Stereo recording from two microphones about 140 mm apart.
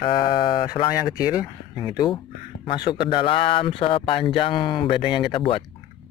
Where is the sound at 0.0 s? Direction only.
35° left (ahead or behind).